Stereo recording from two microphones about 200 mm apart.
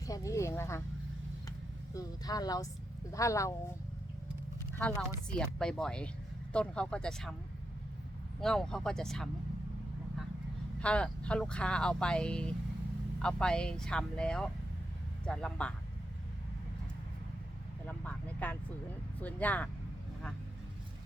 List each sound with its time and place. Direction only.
0.0 s a sound: 15° left (ahead or behind)
1.9 s speech: 20° left (ahead or behind)
4.8 s speech: 5° left (ahead or behind)
8.4 s speech: centre (ahead or behind)
10.8 s speech: 5° left (ahead or behind)
17.8 s vehicle: 5° left (ahead or behind)
19.2 s speech: 10° left (ahead or behind)